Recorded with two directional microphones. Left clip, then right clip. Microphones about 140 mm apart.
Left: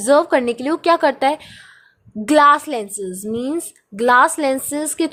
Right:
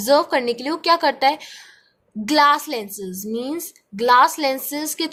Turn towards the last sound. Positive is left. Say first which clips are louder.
# left 4 dB
turn(degrees=20)  # may be behind; listen again after turning